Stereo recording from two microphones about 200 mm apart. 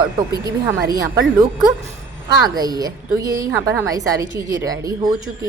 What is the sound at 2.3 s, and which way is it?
A woman's voice, 20° right (ahead or behind).